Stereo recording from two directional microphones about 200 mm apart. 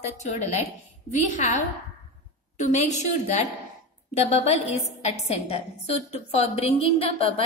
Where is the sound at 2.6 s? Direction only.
35° left (ahead or behind).